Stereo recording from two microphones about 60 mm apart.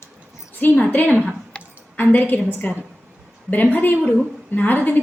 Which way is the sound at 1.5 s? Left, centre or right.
Centre.